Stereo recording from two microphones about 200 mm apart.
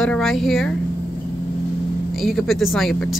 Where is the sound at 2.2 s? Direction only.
Centre (ahead or behind).